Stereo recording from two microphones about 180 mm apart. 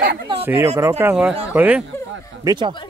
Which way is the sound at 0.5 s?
15° right (ahead or behind).